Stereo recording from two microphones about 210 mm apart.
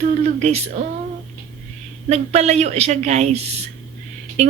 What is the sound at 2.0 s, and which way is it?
Speech, 30° right (ahead or behind).